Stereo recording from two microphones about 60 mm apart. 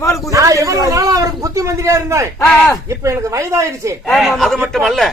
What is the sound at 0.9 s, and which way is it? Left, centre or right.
A man's voice, right.